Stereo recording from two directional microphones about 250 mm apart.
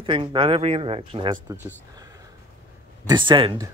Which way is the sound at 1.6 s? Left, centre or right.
Centre.